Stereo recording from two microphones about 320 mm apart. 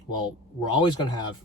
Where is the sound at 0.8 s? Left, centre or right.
Centre.